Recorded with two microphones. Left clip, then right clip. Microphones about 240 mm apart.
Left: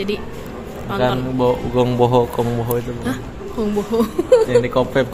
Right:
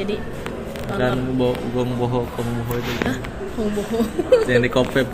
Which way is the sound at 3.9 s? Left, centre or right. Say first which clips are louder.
Left 3 dB; left.